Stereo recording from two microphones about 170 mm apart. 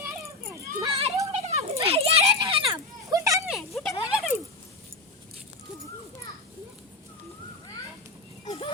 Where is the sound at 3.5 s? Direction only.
Centre (ahead or behind).